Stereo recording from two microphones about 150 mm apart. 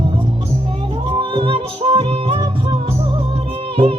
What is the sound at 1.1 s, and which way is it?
Music, 35° right (ahead or behind).